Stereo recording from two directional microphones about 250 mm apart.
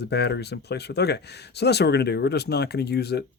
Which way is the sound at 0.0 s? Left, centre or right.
Left.